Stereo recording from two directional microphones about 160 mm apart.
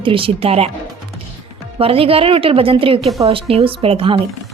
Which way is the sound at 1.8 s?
35° right (ahead or behind).